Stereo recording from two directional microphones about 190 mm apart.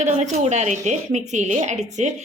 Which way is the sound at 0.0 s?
40° right (ahead or behind).